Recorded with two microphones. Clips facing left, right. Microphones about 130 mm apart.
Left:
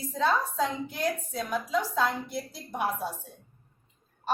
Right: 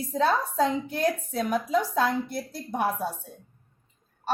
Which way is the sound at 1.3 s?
55° right (ahead or behind).